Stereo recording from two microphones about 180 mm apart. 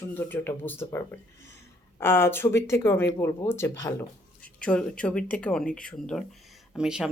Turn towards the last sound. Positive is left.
turn(degrees=-5)  # may be behind; listen again after turning